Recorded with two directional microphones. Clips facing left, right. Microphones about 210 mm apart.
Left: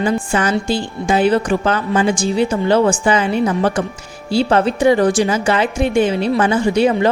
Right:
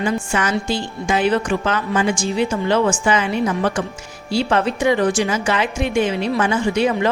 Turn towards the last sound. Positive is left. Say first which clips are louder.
# left 4 dB
turn(degrees=35)  # may be behind; listen again after turning